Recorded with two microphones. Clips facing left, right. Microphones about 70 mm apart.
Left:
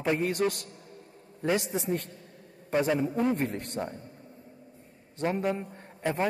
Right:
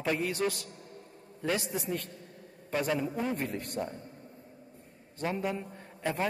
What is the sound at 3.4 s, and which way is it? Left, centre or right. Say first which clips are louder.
Speech: left 3 dB; left.